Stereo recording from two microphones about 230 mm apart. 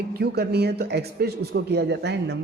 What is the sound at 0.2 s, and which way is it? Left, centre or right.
Speech, right.